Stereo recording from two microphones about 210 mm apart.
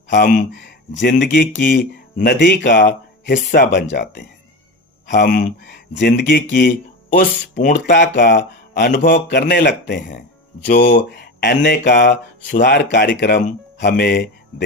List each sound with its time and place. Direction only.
0.1 s speech: 50° left (ahead or behind)
1.6 s speech: 40° left (ahead or behind)
2.6 s speech: 40° left (ahead or behind)
5.1 s speech: 45° left (ahead or behind)
5.9 s speech: 55° left (ahead or behind); by 7.9 s 40° left (ahead or behind)
8.1 s speech: 50° left (ahead or behind)
8.9 s speech: 40° left (ahead or behind)